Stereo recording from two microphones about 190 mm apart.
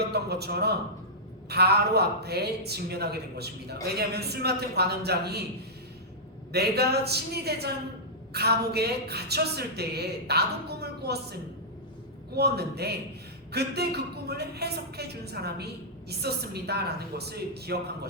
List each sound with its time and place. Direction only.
0.1 s a man's voice: 60° right (ahead or behind)
6.5 s a man's voice: 60° right (ahead or behind)
12.4 s a man's voice: 60° right (ahead or behind)